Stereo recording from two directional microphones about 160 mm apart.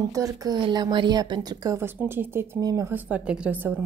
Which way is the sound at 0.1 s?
20° right (ahead or behind).